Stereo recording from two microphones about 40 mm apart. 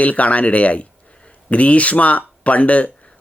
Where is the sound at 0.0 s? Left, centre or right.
Left.